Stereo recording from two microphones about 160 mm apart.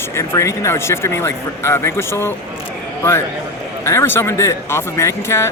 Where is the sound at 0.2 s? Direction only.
20° left (ahead or behind).